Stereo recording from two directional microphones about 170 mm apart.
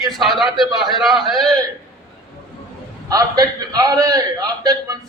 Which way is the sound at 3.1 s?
20° right (ahead or behind).